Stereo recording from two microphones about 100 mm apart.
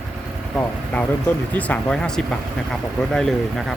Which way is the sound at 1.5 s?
15° left (ahead or behind).